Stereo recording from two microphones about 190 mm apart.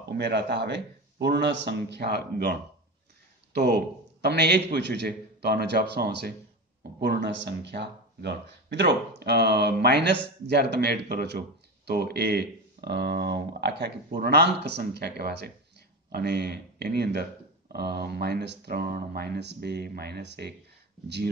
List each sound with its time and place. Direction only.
0.2 s speech: 60° right (ahead or behind)
3.5 s a man's voice: 60° right (ahead or behind)